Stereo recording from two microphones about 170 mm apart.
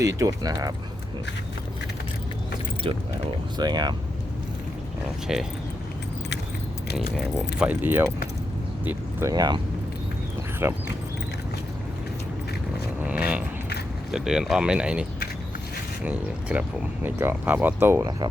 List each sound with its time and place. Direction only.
0.0 s speech: 20° right (ahead or behind)
3.6 s speech: 25° right (ahead or behind)
5.3 s speech: 5° right (ahead or behind)
7.3 s speech: 5° right (ahead or behind)
9.3 s speech: 20° right (ahead or behind)
10.6 s speech: 15° right (ahead or behind)
13.0 s speech: 10° right (ahead or behind)
16.0 s speech: 10° right (ahead or behind)